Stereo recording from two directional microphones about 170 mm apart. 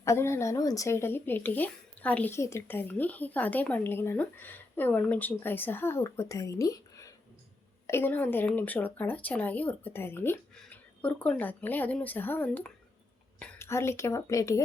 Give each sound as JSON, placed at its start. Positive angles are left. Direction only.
{"t": 0.0, "sound": "speech", "side_deg": 15}